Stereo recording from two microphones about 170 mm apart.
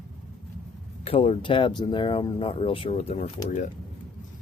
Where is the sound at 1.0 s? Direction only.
35° left (ahead or behind).